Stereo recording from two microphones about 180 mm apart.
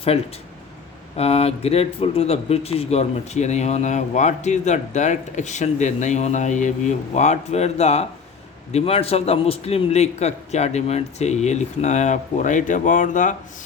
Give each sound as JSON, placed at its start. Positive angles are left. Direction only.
{"t": 0.1, "sound": "speech", "side_deg": 35}